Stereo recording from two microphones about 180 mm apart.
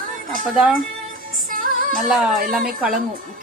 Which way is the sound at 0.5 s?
5° right (ahead or behind).